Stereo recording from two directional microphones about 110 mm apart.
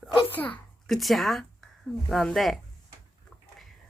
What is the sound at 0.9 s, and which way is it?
Speech, centre (ahead or behind).